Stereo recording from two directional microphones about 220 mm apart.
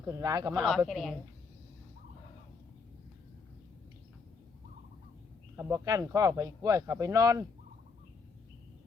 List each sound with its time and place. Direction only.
0.0 s speech: 15° right (ahead or behind)
0.9 s a woman's voice: centre (ahead or behind)
5.5 s speech: 10° right (ahead or behind)